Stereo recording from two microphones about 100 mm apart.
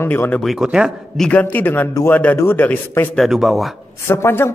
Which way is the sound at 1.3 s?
15° left (ahead or behind).